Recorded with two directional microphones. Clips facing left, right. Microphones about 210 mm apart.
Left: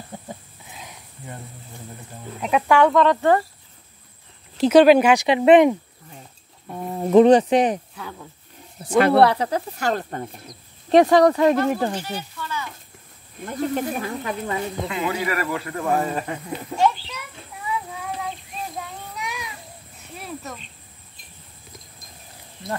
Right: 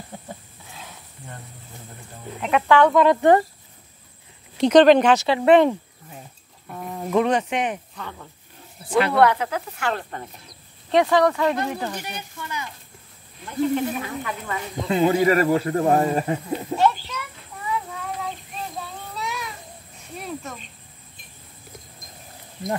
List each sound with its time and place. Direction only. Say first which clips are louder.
0.7 s a sound: left 1 dB; 15° left (ahead or behind)
2.4 s speech: even; 10° left (ahead or behind)
2.9 s speech: right 2 dB; 10° right (ahead or behind)
4.6 s speech: left 1 dB; 5° left (ahead or behind)
6.7 s speech: left 7 dB; 30° left (ahead or behind)
7.9 s speech: left 1 dB; 10° left (ahead or behind)
8.8 s speech: left 3 dB; 45° left (ahead or behind)
12.0 s a sound: left 3 dB; 15° right (ahead or behind)
13.4 s speech: right 2 dB; 45° left (ahead or behind)
14.9 s speech: right 11 dB; 30° right (ahead or behind)
16.7 s a child's voice: even; 20° right (ahead or behind)
18.8 s child singing: even; 15° left (ahead or behind)
20.2 s a sound: right 2 dB; centre (ahead or behind)